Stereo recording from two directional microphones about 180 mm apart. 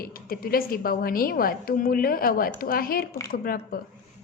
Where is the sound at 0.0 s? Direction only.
55° left (ahead or behind).